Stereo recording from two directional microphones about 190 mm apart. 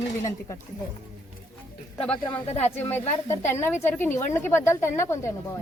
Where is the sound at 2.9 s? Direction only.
15° left (ahead or behind).